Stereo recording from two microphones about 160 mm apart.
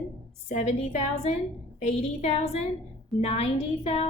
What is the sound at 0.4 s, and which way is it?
A woman's voice, 45° left (ahead or behind).